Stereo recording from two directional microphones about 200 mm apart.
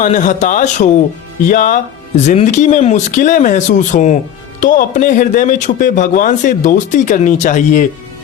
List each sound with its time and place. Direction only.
0.0 s speech: 40° left (ahead or behind)